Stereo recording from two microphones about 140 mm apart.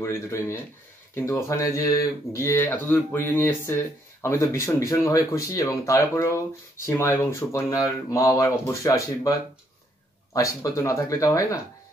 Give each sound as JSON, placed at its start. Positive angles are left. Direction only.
{"t": 0.0, "sound": "speech", "side_deg": 20}
{"t": 10.3, "sound": "speech", "side_deg": 25}